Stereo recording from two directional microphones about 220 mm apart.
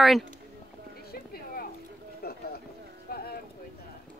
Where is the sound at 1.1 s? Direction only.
45° left (ahead or behind).